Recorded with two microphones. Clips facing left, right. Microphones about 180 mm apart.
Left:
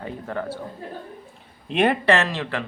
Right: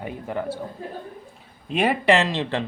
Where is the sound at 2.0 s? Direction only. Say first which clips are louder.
Right 1 dB; 15° right (ahead or behind).